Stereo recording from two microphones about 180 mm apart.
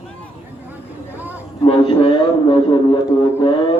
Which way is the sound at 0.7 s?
10° right (ahead or behind).